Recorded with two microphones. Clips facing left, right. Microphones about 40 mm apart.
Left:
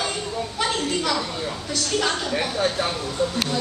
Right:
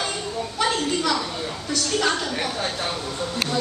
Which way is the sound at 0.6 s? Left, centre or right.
Centre.